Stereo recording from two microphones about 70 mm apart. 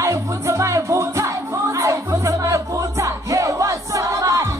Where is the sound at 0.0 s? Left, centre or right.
Right.